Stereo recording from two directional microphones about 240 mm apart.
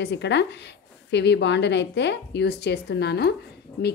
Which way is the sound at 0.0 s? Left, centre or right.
Left.